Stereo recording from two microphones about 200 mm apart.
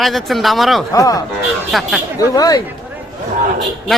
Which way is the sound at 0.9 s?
15° left (ahead or behind).